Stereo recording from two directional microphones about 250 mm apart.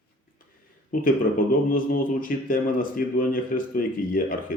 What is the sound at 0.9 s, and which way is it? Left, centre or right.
Speech, left.